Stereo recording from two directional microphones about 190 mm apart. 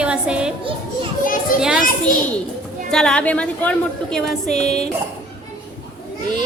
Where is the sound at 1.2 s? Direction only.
45° left (ahead or behind).